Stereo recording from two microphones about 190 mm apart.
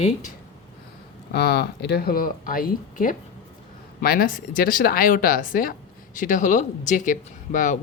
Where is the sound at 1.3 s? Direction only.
55° left (ahead or behind).